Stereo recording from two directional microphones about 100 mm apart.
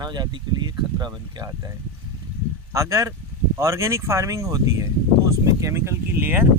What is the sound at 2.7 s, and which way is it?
Speech, 30° right (ahead or behind).